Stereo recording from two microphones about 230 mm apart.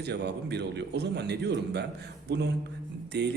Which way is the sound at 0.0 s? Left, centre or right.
Right.